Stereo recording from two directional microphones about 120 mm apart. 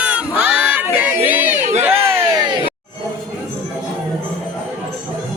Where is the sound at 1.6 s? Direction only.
75° right (ahead or behind).